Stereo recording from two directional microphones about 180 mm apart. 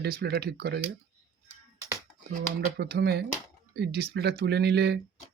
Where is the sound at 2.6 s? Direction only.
65° right (ahead or behind).